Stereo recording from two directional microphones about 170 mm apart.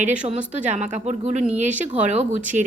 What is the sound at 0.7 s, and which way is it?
Speech, 45° right (ahead or behind).